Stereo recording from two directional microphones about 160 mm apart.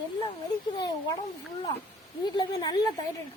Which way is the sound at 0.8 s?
25° left (ahead or behind).